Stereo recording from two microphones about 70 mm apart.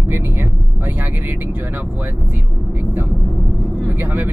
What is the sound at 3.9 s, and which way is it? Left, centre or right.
Speech, right.